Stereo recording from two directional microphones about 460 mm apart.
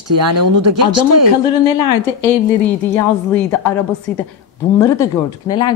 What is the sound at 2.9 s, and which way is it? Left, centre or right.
A woman's voice, centre.